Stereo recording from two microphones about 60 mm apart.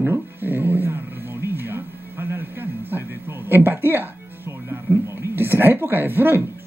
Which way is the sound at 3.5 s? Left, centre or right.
Right.